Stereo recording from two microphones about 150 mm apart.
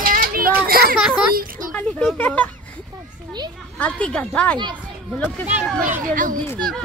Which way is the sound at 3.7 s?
10° left (ahead or behind).